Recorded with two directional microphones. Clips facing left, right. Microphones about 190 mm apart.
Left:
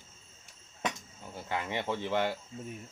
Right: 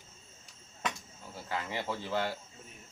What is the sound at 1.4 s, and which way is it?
Speech, 20° left (ahead or behind).